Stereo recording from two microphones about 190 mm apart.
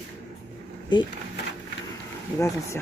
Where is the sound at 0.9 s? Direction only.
25° left (ahead or behind).